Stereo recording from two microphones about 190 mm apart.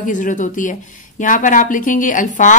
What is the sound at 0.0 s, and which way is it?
A woman's voice, 40° left (ahead or behind).